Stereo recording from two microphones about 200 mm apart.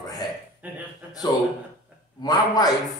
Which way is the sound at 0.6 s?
10° right (ahead or behind).